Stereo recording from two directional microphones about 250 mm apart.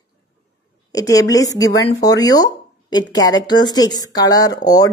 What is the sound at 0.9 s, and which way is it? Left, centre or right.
Speech, centre.